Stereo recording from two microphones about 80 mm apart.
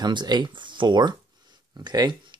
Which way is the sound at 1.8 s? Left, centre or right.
Right.